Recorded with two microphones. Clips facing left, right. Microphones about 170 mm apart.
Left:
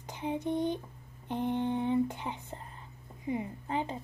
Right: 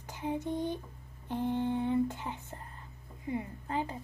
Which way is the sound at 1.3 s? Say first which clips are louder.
Even; 20° left (ahead or behind).